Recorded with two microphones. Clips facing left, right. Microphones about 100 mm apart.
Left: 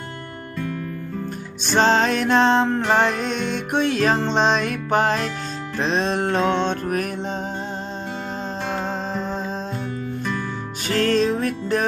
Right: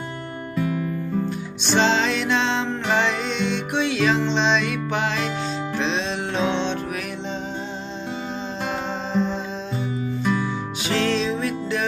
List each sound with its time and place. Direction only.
0.5 s music: 15° right (ahead or behind)
1.6 s music: 45° left (ahead or behind)
10.8 s music: 45° left (ahead or behind)